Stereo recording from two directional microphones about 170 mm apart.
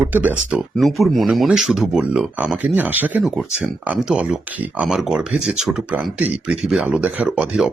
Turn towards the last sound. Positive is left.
turn(degrees=-5)  # may be behind; listen again after turning